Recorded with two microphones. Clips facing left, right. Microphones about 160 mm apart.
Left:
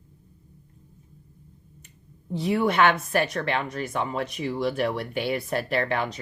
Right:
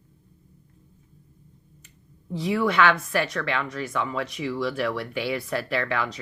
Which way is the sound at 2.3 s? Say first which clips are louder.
Even; 55° left (ahead or behind).